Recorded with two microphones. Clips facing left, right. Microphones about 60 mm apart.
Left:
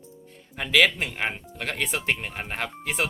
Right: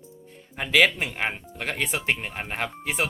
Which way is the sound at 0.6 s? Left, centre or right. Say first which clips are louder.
Right 1 dB; centre.